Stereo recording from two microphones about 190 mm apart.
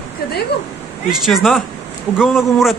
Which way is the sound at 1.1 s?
Centre (ahead or behind).